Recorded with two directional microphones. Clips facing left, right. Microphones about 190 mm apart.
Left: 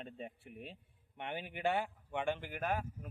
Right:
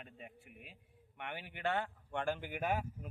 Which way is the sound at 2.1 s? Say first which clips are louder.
Even; centre (ahead or behind).